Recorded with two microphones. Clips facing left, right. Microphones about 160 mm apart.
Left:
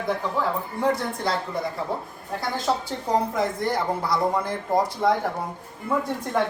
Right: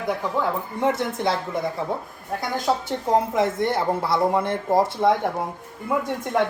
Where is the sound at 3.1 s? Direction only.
25° right (ahead or behind).